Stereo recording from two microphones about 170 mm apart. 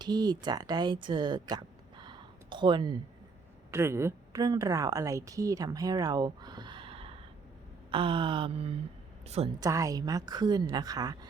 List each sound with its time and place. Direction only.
0.0 s speech: 25° right (ahead or behind)
3.7 s a woman's voice: 15° right (ahead or behind); by 7.2 s 35° right (ahead or behind)
7.9 s a sound: 30° right (ahead or behind)
9.6 s a woman's voice: 20° right (ahead or behind)